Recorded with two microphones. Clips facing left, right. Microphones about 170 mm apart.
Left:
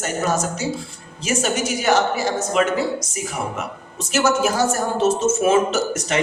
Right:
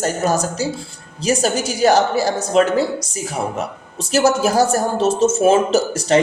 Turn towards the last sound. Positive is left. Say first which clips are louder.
# right 6 dB
turn(degrees=-35)  # may be behind; listen again after turning